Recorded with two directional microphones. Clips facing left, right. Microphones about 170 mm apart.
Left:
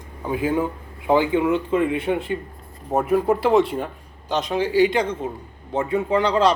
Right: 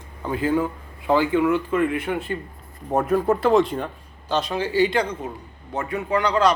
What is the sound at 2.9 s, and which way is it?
A man's voice, 5° left (ahead or behind).